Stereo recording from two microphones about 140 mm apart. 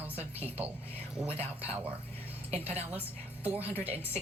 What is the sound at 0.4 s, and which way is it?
Speech, 10° right (ahead or behind).